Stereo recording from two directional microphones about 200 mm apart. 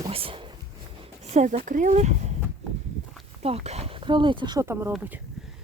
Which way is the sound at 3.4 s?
30° right (ahead or behind).